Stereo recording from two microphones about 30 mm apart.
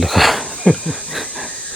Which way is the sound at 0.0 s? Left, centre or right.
Centre.